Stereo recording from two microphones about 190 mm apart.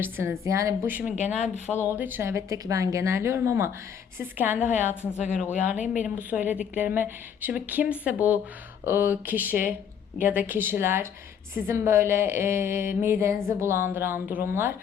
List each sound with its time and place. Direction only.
0.0 s a woman's voice: 15° right (ahead or behind)
4.6 s a woman's voice: 40° left (ahead or behind)
6.1 s a woman's voice: 10° right (ahead or behind)